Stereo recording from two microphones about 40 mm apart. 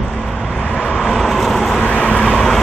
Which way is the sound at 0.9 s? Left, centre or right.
Centre.